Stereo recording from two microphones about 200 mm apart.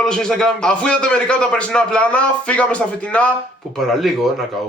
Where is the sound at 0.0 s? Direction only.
5° left (ahead or behind).